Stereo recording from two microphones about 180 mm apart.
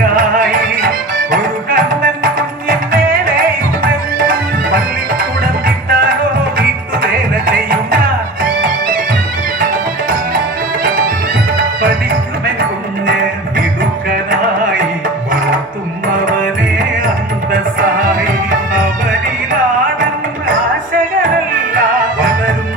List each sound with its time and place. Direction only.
0.0 s music: 50° right (ahead or behind)
9.6 s music: 50° right (ahead or behind)
17.5 s music: 50° right (ahead or behind)